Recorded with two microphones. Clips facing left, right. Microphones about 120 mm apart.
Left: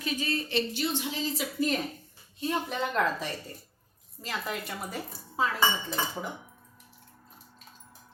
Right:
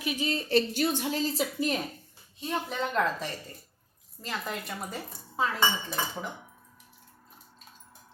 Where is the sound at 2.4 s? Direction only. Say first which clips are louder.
Left 1 dB; centre (ahead or behind).